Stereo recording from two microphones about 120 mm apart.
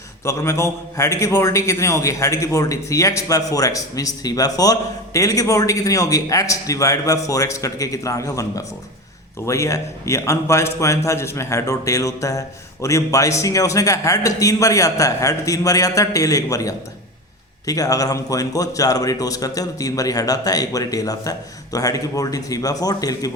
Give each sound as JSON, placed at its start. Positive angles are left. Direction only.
{"t": 0.3, "sound": "a man's voice", "side_deg": 25}